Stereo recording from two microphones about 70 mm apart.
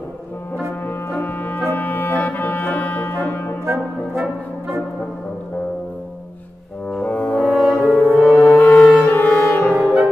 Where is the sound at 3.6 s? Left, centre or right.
Right.